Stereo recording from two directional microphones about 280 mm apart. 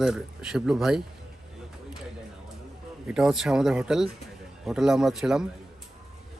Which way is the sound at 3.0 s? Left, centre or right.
Centre.